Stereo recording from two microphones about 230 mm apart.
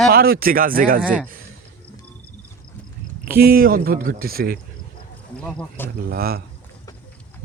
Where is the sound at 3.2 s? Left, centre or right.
Right.